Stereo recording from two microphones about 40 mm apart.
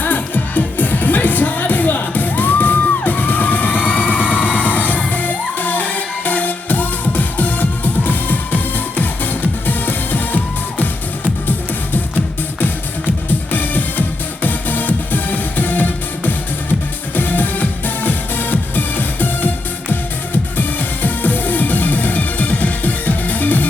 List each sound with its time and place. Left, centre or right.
0.0 s music: left
13.5 s music: left
20.6 s music: left